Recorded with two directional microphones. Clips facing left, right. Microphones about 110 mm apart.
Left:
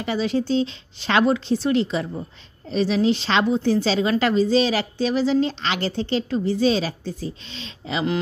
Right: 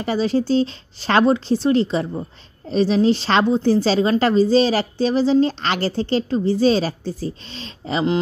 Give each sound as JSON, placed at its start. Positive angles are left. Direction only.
{"t": 0.0, "sound": "a woman's voice", "side_deg": -35}